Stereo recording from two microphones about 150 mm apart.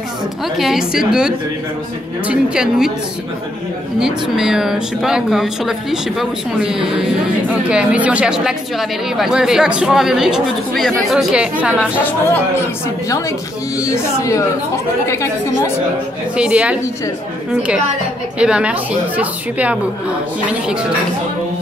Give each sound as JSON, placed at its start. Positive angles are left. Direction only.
{"t": 0.6, "sound": "speech", "side_deg": 0}
{"t": 4.0, "sound": "speech", "side_deg": -5}
{"t": 13.7, "sound": "speech", "side_deg": 20}
{"t": 16.3, "sound": "speech", "side_deg": -5}
{"t": 18.4, "sound": "speech", "side_deg": -5}